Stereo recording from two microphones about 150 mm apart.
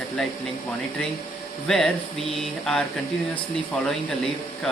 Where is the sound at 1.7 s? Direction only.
Centre (ahead or behind).